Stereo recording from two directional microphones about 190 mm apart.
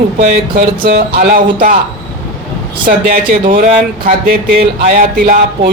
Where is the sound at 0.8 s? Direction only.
55° right (ahead or behind).